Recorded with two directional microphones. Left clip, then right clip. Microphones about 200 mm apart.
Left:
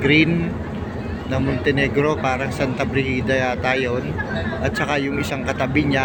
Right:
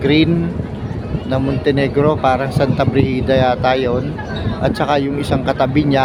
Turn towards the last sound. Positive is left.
turn(degrees=-25)  # may be behind; listen again after turning